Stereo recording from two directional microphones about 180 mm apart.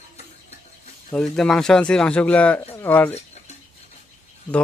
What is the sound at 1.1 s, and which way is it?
A man's voice, centre (ahead or behind).